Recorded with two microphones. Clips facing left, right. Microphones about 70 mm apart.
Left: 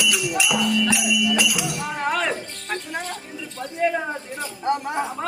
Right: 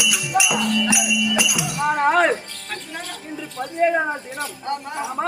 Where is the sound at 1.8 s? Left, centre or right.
Right.